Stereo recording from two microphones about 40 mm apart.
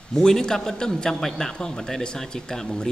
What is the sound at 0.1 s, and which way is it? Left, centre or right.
Speech, centre.